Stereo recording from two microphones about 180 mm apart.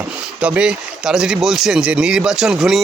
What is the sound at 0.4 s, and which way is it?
Speech, 5° right (ahead or behind).